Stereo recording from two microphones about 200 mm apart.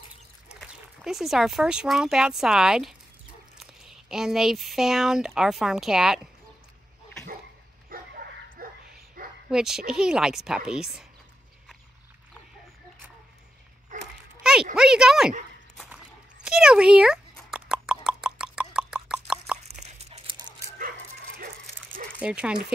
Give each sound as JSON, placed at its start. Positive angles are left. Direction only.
{"t": 0.5, "sound": "speech", "side_deg": -5}
{"t": 7.9, "sound": "bow-wow", "side_deg": -45}
{"t": 9.5, "sound": "a woman's voice", "side_deg": 0}
{"t": 14.4, "sound": "a sound", "side_deg": -5}
{"t": 14.8, "sound": "a woman's voice", "side_deg": -5}
{"t": 16.4, "sound": "a sound", "side_deg": -5}
{"t": 19.8, "sound": "crunch", "side_deg": -30}
{"t": 22.2, "sound": "a woman's voice", "side_deg": -5}